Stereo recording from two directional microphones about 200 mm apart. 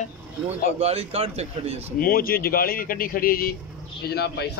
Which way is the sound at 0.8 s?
30° right (ahead or behind).